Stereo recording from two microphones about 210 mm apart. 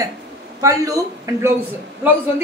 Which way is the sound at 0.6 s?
15° right (ahead or behind).